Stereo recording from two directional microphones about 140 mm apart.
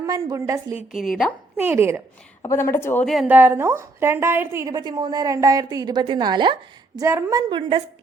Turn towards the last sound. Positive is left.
turn(degrees=-35)  # may be behind; listen again after turning